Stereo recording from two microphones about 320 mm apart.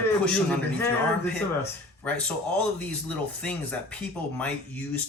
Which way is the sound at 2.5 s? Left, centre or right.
Centre.